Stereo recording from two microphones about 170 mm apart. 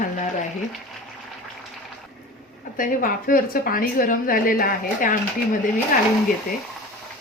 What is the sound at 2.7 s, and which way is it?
A woman's voice, 55° left (ahead or behind).